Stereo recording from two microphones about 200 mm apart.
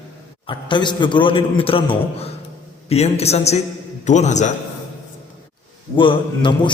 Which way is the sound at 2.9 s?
30° left (ahead or behind).